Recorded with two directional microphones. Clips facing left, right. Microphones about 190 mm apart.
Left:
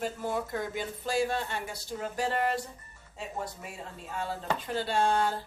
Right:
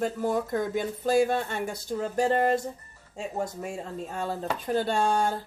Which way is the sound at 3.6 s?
45° right (ahead or behind).